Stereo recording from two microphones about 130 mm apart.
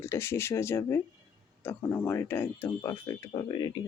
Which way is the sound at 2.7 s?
25° left (ahead or behind).